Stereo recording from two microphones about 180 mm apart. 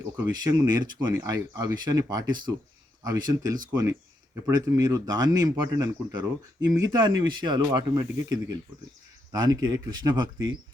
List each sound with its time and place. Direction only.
0.0 s speech: 20° right (ahead or behind)